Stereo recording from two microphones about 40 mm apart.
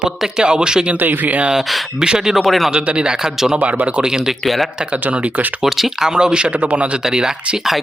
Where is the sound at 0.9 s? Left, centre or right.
Right.